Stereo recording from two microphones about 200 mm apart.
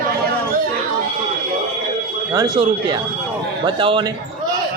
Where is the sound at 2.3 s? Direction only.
20° right (ahead or behind).